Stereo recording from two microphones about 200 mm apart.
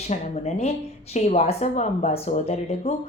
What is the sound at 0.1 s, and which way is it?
A woman's voice, 35° left (ahead or behind).